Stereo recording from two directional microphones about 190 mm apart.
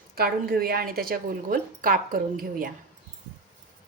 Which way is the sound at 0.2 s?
55° right (ahead or behind).